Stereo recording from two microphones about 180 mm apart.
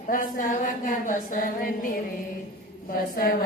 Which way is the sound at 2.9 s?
50° left (ahead or behind).